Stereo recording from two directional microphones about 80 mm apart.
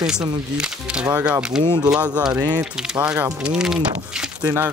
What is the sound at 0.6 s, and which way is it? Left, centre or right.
Speech, centre.